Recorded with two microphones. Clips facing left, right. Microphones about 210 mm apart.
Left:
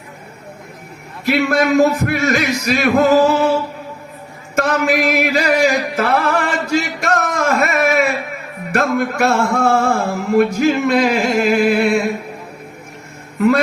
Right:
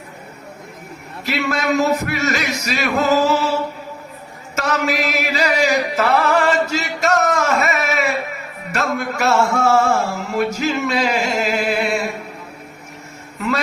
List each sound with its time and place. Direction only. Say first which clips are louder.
1.2 s speech: left 6 dB; 50° left (ahead or behind)
4.5 s music: left 4 dB; 55° left (ahead or behind)
8.7 s speech: left 5 dB; 50° left (ahead or behind)